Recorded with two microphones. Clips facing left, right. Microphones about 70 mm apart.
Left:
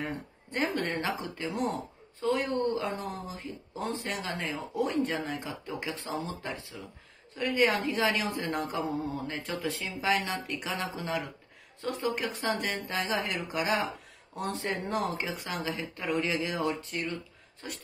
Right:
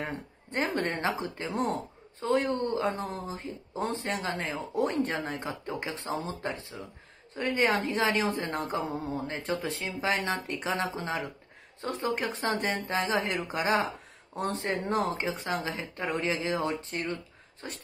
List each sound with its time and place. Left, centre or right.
0.5 s speech: right